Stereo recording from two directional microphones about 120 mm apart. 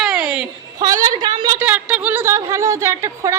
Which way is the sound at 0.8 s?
30° right (ahead or behind).